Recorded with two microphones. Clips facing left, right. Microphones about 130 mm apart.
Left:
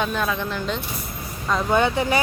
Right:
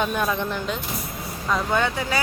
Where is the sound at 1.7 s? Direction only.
15° left (ahead or behind).